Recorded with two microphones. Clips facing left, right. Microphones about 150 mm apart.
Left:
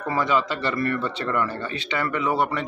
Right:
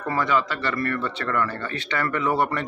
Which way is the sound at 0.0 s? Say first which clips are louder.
Even; 20° left (ahead or behind).